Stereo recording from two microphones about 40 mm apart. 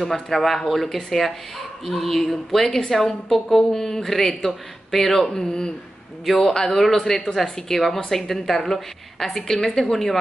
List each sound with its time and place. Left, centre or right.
0.0 s a woman's voice: centre
5.3 s speech: centre
6.2 s a woman's voice: centre